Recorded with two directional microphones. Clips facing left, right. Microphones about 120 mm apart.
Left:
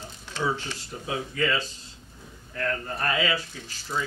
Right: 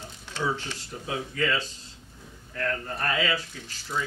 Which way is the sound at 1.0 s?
10° left (ahead or behind).